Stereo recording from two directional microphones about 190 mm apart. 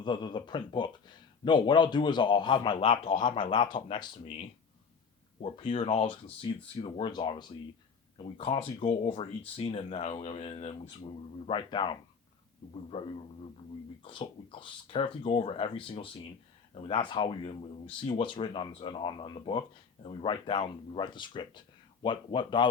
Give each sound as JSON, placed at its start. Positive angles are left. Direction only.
{"t": 0.0, "sound": "speech", "side_deg": 25}